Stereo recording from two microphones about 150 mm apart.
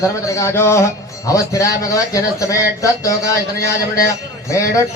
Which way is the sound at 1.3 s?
20° left (ahead or behind).